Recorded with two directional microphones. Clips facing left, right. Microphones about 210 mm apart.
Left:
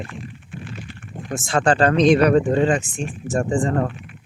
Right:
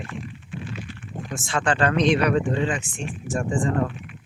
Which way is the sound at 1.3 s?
40° left (ahead or behind).